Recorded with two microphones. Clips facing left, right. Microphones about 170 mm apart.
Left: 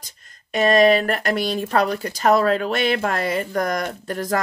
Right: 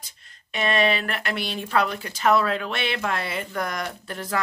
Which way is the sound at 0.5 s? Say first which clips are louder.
Left 8 dB; 40° left (ahead or behind).